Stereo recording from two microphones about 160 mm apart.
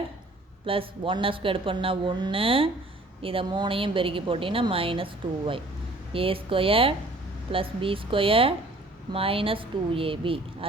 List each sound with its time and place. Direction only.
0.6 s a woman's voice: 35° right (ahead or behind)